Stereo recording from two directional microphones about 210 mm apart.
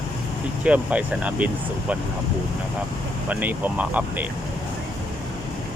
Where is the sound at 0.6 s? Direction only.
5° right (ahead or behind).